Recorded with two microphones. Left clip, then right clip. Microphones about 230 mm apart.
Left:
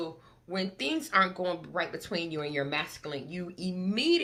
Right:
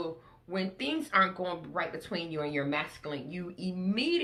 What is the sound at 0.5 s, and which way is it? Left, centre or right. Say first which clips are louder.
Speech: left 1 dB; left.